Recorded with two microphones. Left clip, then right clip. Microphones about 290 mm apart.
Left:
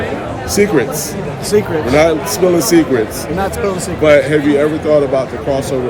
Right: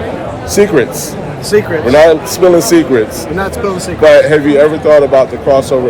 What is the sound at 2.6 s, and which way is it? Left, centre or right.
Speech, centre.